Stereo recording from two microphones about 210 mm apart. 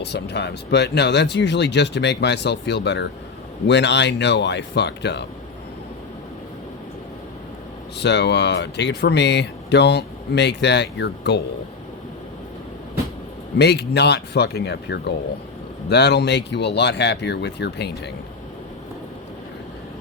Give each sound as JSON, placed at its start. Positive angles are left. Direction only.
{"t": 0.0, "sound": "speech", "side_deg": 55}
{"t": 7.9, "sound": "speech", "side_deg": 55}
{"t": 13.6, "sound": "speech", "side_deg": 50}